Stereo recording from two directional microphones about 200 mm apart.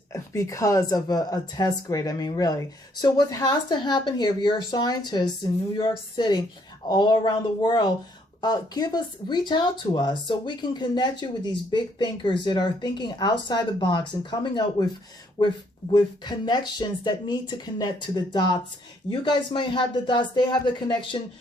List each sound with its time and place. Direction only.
0.1 s speech: 15° left (ahead or behind)